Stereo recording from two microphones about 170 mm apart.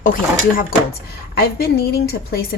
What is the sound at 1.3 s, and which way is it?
A woman's voice, 65° left (ahead or behind).